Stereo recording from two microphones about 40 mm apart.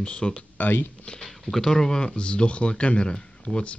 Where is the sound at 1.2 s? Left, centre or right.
Centre.